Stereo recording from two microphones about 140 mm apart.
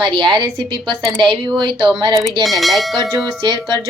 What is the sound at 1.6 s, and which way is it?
Speech, 35° right (ahead or behind).